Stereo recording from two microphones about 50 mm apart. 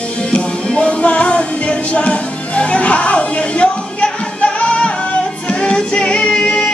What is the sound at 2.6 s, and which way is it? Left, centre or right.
Music, left.